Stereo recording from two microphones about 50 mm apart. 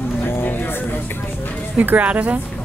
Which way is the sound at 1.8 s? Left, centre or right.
Right.